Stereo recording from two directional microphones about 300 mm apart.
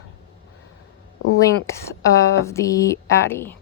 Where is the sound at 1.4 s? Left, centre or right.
Centre.